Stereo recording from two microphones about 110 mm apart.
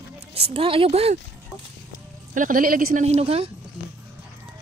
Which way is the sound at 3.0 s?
70° right (ahead or behind).